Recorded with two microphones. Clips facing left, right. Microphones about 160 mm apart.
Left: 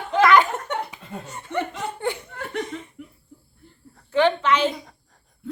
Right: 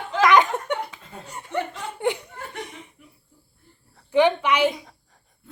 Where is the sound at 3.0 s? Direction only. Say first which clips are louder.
Left 11 dB; 75° left (ahead or behind).